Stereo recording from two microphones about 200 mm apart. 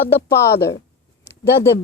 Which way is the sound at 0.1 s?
55° left (ahead or behind).